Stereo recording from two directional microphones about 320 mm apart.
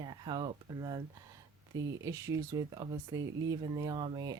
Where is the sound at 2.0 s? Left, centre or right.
Centre.